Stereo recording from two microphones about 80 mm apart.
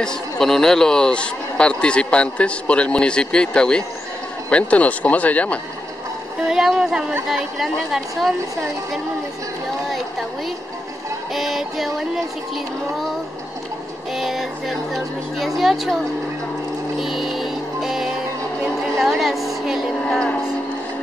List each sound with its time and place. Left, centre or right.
0.0 s a man's voice: centre
6.4 s a woman's voice: centre
11.3 s speech: centre
14.1 s speech: centre
17.0 s music: centre
18.6 s a sound: centre
20.1 s a man's voice: centre